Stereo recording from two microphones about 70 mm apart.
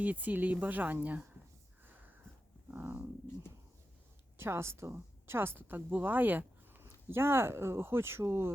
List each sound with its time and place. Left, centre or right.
0.0 s a woman's voice: right
2.6 s wild animals: right
4.4 s speech: right